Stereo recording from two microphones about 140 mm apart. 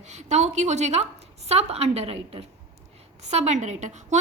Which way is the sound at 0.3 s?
55° right (ahead or behind).